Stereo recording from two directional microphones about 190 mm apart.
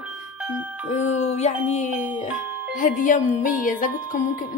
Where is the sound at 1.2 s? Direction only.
35° left (ahead or behind).